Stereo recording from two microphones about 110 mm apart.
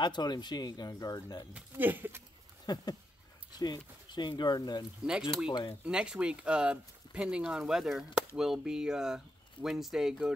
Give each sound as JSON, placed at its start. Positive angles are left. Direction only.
{"t": 0.0, "sound": "speech", "side_deg": 40}
{"t": 1.5, "sound": "speech", "side_deg": -15}
{"t": 2.6, "sound": "a sound", "side_deg": 40}
{"t": 3.5, "sound": "speech", "side_deg": 40}
{"t": 5.9, "sound": "speech", "side_deg": -10}